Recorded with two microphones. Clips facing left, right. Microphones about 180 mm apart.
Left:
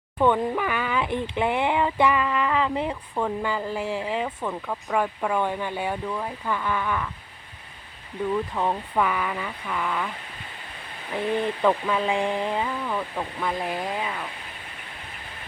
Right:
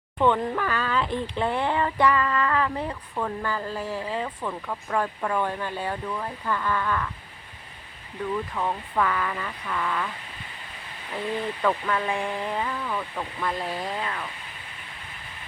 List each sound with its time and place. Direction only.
0.2 s speech: 10° left (ahead or behind)
4.4 s speech: 5° left (ahead or behind)
8.5 s speech: 15° left (ahead or behind)
11.3 s speech: 20° left (ahead or behind)